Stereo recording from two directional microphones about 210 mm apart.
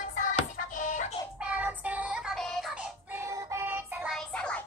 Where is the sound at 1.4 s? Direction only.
5° right (ahead or behind).